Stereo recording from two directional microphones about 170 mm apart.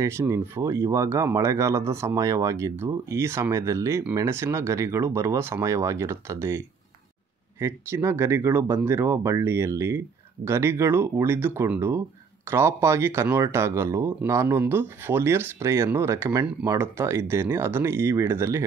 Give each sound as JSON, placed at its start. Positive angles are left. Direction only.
{"t": 0.0, "sound": "speech", "side_deg": -15}